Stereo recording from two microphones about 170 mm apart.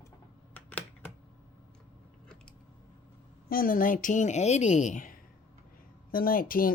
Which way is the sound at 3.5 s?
55° left (ahead or behind).